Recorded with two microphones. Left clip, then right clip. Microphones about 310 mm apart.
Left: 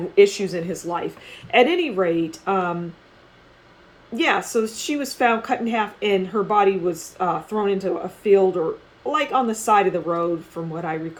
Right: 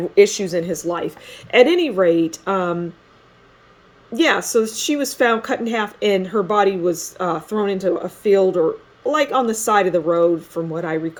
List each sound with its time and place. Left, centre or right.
0.2 s speech: right
4.1 s speech: right